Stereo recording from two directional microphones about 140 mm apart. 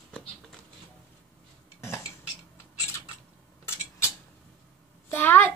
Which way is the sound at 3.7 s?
20° left (ahead or behind).